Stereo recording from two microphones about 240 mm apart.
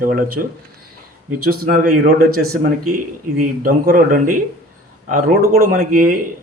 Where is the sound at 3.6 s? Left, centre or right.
Right.